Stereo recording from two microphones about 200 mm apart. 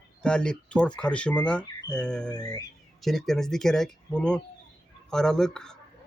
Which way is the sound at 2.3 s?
20° left (ahead or behind).